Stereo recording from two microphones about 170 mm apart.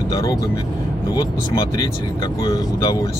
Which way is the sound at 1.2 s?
25° left (ahead or behind).